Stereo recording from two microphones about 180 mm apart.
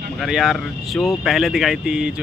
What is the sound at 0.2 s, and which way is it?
Speech, centre (ahead or behind).